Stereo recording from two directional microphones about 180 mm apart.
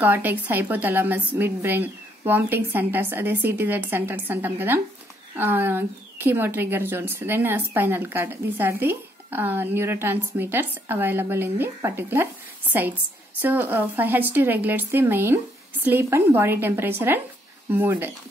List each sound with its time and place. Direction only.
0.0 s speech: 10° right (ahead or behind)